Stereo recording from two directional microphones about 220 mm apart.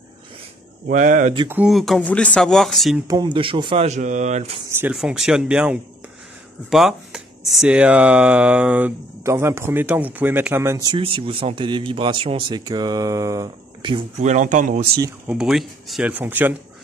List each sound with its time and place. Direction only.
0.8 s speech: 35° right (ahead or behind)
1.5 s speech: 5° right (ahead or behind)
3.1 s speech: 20° right (ahead or behind)
4.6 s speech: 10° right (ahead or behind); by 14.9 s 35° right (ahead or behind)
15.2 s speech: centre (ahead or behind)